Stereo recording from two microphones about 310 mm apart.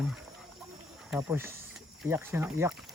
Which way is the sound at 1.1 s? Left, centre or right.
Centre.